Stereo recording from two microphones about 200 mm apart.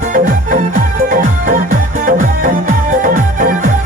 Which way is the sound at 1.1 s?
45° right (ahead or behind).